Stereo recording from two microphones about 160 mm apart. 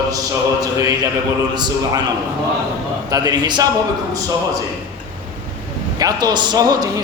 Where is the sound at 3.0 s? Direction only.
25° right (ahead or behind).